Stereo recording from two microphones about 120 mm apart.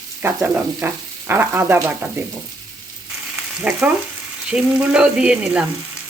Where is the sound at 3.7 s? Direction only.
10° right (ahead or behind).